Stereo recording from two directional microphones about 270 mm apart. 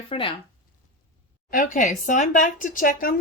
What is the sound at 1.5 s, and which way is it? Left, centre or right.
Speech, left.